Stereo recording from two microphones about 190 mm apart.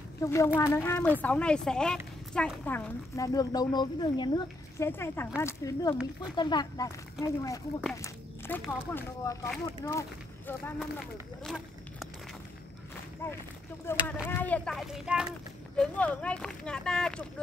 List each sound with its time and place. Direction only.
0.2 s speech: 15° left (ahead or behind)
4.8 s speech: 10° left (ahead or behind)
11.4 s a sound: centre (ahead or behind)
13.8 s speech: 10° left (ahead or behind)